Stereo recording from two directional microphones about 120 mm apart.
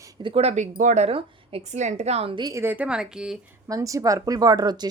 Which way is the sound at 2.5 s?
15° right (ahead or behind).